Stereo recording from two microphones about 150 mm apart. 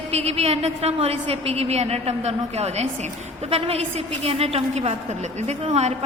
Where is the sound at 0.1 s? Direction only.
45° right (ahead or behind).